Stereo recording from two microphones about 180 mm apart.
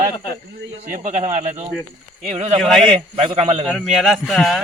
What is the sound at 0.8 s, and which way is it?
A man's voice, 45° right (ahead or behind).